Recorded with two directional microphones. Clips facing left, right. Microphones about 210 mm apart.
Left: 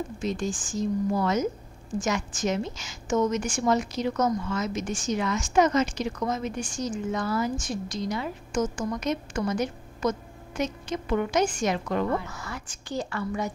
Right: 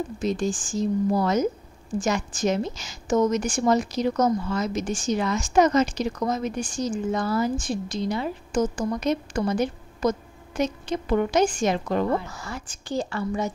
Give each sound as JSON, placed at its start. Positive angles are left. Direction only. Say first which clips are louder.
{"t": 0.2, "sound": "a woman's voice", "louder": "right 5 dB", "side_deg": -35}